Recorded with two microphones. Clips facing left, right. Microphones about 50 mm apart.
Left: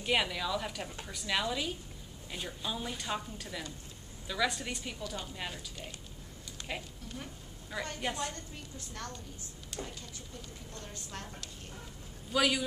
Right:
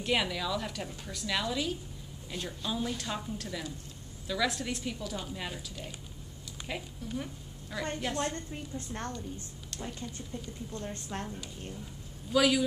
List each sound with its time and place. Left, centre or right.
0.0 s a woman's voice: centre
7.0 s speech: centre
7.7 s a woman's voice: centre
8.3 s a woman's voice: right
9.7 s speech: centre
10.3 s a woman's voice: right
12.3 s a woman's voice: centre